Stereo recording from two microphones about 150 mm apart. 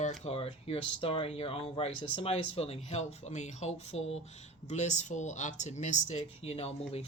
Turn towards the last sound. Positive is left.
turn(degrees=45)  # may be behind; listen again after turning